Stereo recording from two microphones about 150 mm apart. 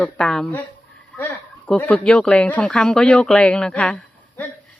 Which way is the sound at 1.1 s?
20° left (ahead or behind).